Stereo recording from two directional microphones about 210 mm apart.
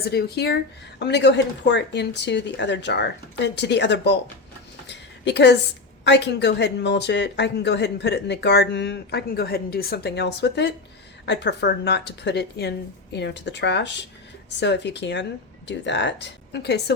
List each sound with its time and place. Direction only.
0.0 s a woman's voice: 50° left (ahead or behind)
4.9 s a sound: 55° left (ahead or behind)
6.1 s a woman's voice: 55° left (ahead or behind)